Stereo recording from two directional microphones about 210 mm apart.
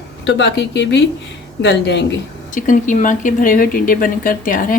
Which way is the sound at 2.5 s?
35° left (ahead or behind).